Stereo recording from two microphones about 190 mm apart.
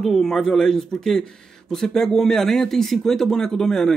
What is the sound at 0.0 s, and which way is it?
Speech, centre (ahead or behind).